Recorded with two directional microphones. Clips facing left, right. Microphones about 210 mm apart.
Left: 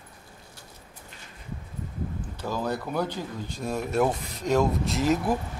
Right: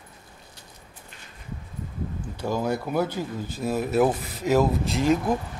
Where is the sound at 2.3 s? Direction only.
10° right (ahead or behind).